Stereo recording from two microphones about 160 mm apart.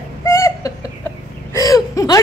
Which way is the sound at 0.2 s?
20° left (ahead or behind).